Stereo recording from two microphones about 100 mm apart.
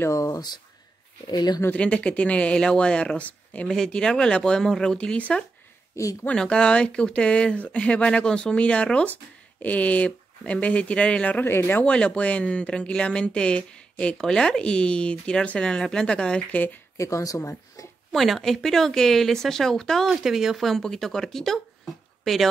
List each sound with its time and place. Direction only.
0.0 s speech: 30° left (ahead or behind)
1.8 s speech: 10° left (ahead or behind)
16.9 s speech: 30° left (ahead or behind)
18.1 s speech: centre (ahead or behind)